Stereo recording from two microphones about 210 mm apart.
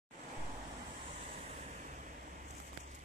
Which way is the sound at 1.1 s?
35° right (ahead or behind).